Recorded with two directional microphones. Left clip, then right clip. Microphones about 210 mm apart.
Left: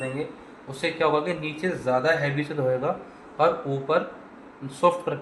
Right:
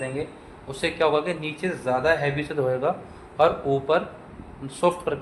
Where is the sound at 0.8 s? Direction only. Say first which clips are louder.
Right 1 dB; 15° right (ahead or behind).